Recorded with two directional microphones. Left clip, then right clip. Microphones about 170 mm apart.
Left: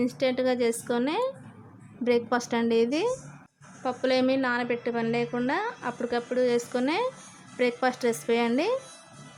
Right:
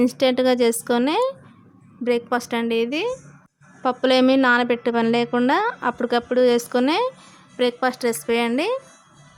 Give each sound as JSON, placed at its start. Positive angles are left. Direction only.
{"t": 0.0, "sound": "a woman's voice", "side_deg": -30}
{"t": 2.0, "sound": "a woman's voice", "side_deg": -10}
{"t": 3.8, "sound": "a woman's voice", "side_deg": -30}